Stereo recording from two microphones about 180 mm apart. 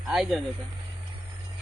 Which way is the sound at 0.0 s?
Centre (ahead or behind).